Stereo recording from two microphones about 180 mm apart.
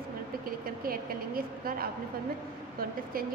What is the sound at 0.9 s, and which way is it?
A woman's voice, 55° right (ahead or behind).